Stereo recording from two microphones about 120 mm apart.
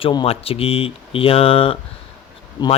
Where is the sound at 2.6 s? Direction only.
35° left (ahead or behind).